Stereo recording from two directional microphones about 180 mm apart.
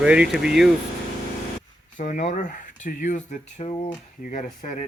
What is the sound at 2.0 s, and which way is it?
Speech, 45° left (ahead or behind).